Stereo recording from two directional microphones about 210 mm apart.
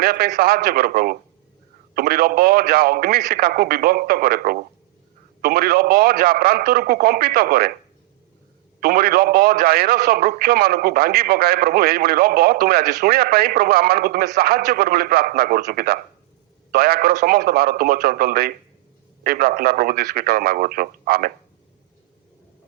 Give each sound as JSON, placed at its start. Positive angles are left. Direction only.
{"t": 0.0, "sound": "a man's voice", "side_deg": -45}
{"t": 8.8, "sound": "a man's voice", "side_deg": -45}